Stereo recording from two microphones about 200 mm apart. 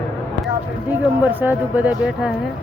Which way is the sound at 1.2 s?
10° right (ahead or behind).